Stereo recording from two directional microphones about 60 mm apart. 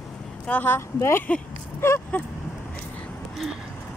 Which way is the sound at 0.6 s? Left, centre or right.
Left.